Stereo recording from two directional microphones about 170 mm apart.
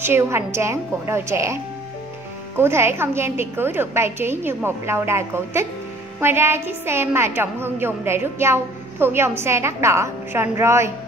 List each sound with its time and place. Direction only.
0.0 s a woman's voice: 15° right (ahead or behind)